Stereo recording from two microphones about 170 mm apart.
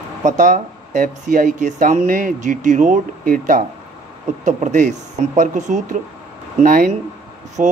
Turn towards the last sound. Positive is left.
turn(degrees=-45)  # may be behind; listen again after turning